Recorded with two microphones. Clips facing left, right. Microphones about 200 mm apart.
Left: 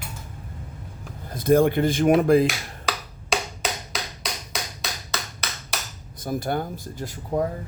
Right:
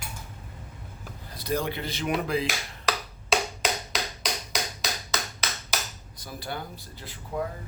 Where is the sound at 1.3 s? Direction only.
50° left (ahead or behind).